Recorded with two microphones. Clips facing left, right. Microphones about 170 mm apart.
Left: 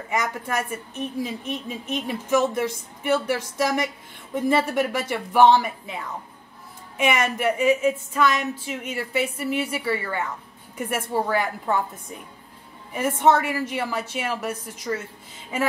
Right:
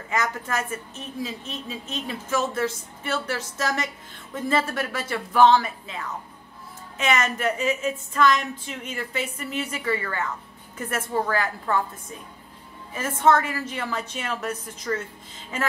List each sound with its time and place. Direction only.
0.1 s a woman's voice: 15° left (ahead or behind)
7.0 s a woman's voice: 15° left (ahead or behind)